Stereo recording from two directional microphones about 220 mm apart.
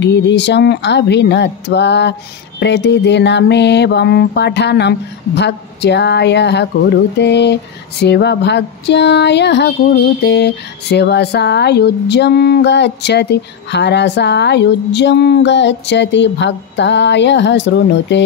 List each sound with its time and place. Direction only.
0.0 s speech: 50° left (ahead or behind)